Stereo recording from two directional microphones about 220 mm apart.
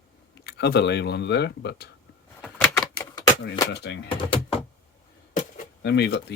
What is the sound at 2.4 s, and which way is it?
Typewriter, 5° left (ahead or behind).